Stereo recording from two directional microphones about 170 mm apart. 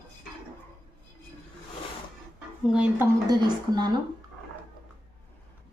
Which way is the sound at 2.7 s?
5° right (ahead or behind).